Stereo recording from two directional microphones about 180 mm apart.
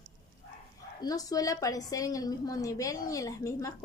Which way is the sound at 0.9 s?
20° left (ahead or behind).